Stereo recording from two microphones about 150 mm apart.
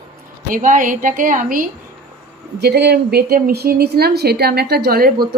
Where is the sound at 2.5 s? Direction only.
90° right.